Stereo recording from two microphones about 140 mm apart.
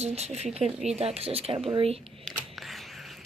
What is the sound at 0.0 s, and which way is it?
Speech, 50° right (ahead or behind).